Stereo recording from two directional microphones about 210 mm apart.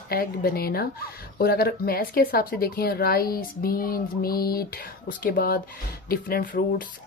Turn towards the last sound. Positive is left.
turn(degrees=45)  # may be behind; listen again after turning